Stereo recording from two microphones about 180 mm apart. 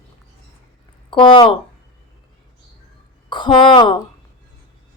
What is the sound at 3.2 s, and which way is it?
Speech, 25° left (ahead or behind).